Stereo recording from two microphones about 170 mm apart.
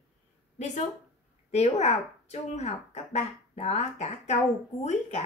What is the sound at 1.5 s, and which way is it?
A woman's voice, 40° left (ahead or behind).